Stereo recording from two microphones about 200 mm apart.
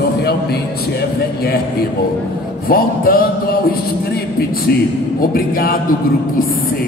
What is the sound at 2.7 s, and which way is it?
Speech, 50° left (ahead or behind).